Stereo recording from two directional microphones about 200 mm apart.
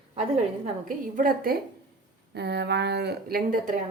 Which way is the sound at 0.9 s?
45° right (ahead or behind).